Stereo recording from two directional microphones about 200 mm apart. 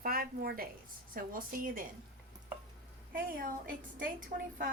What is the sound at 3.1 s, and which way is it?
A woman's voice, 45° right (ahead or behind).